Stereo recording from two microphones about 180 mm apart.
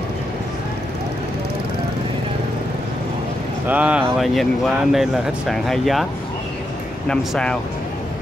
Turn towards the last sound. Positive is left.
turn(degrees=5)  # may be behind; listen again after turning